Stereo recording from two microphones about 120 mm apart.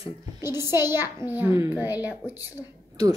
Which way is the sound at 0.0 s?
20° right (ahead or behind).